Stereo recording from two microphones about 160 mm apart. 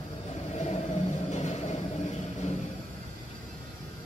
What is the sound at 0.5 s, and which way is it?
Vehicle, 45° left (ahead or behind).